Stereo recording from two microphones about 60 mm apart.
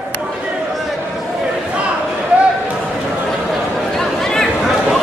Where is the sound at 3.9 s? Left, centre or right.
Centre.